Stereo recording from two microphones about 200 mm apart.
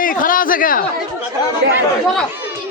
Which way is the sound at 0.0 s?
45° left (ahead or behind).